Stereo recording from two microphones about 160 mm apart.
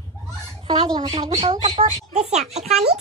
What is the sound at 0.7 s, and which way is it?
Speech, 30° right (ahead or behind).